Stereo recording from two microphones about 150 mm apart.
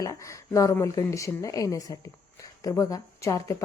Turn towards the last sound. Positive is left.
turn(degrees=20)  # may be behind; listen again after turning